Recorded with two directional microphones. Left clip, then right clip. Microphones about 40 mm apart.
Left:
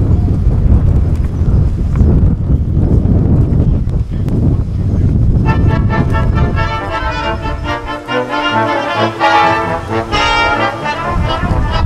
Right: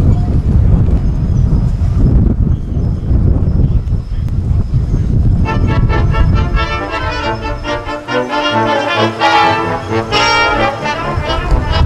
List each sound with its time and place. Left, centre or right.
5.4 s vehicle: centre
6.1 s music: right
8.1 s music: centre
8.7 s brass instrument: centre